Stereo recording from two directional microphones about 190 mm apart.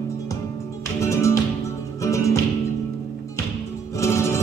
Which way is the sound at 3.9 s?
15° left (ahead or behind).